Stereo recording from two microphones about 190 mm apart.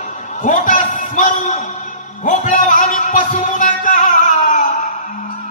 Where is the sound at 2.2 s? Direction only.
40° left (ahead or behind).